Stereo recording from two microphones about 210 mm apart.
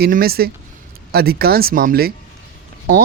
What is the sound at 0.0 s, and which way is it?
A man's voice, 45° right (ahead or behind).